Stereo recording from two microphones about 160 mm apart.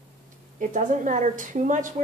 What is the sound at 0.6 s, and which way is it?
A woman's voice, 50° right (ahead or behind).